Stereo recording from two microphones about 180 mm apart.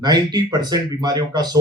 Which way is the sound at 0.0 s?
25° right (ahead or behind).